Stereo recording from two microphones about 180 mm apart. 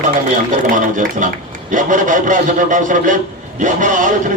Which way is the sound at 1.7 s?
45° right (ahead or behind).